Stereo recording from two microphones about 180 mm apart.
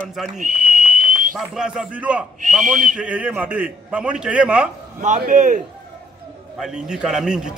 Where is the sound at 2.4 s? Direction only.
45° right (ahead or behind).